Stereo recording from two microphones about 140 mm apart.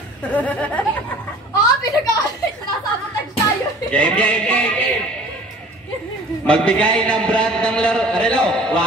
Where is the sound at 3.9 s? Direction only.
10° left (ahead or behind).